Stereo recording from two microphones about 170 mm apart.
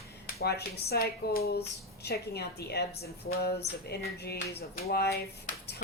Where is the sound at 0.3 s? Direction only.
70° left (ahead or behind).